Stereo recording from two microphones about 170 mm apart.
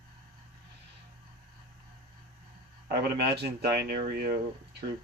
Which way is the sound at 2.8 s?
70° right (ahead or behind).